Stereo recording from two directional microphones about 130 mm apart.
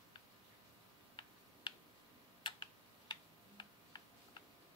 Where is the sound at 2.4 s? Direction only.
35° left (ahead or behind).